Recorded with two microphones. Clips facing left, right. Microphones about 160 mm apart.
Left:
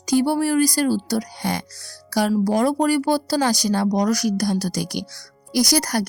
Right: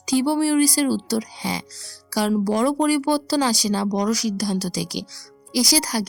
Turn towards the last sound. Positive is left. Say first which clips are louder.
# left 2 dB
turn(degrees=55)  # may be behind; listen again after turning